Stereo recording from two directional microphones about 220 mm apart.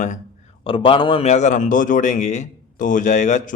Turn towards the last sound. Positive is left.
turn(degrees=35)  # may be behind; listen again after turning